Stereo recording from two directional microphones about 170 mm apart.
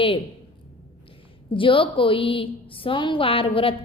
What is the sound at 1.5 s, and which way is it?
A woman's voice, 30° left (ahead or behind).